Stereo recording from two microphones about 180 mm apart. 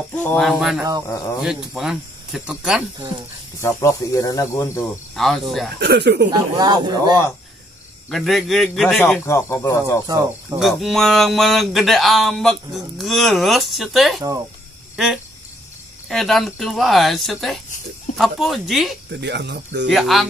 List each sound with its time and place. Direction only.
0.1 s speech: 10° left (ahead or behind)
1.0 s a man's voice: 15° left (ahead or behind)
1.4 s speech: centre (ahead or behind)
3.6 s a man's voice: 15° left (ahead or behind)
5.1 s speech: centre (ahead or behind)
5.8 s speech: 65° right (ahead or behind)
6.3 s speech: 20° right (ahead or behind)
8.1 s a man's voice: centre (ahead or behind)
10.5 s speech: centre (ahead or behind)
16.1 s speech: centre (ahead or behind)
19.1 s speech: 70° right (ahead or behind)
19.9 s speech: centre (ahead or behind)